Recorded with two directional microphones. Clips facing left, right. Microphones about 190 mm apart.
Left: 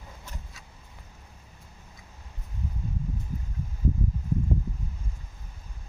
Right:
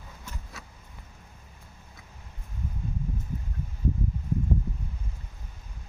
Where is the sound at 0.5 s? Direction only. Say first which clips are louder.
Right 6 dB; 65° right (ahead or behind).